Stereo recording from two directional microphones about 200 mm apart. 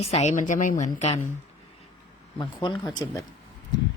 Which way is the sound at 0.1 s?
35° left (ahead or behind).